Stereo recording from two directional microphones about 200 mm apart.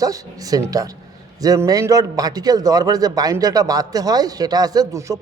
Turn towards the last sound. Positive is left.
turn(degrees=-15)  # may be behind; listen again after turning